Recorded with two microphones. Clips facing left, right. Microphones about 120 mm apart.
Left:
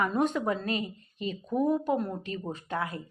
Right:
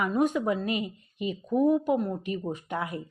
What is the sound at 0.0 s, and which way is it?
A woman's voice, 10° right (ahead or behind).